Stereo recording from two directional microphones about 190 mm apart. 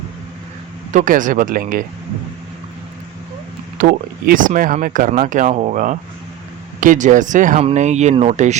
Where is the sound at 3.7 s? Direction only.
45° right (ahead or behind).